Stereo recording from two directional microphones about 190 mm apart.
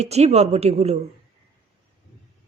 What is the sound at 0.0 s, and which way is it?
Speech, 35° right (ahead or behind).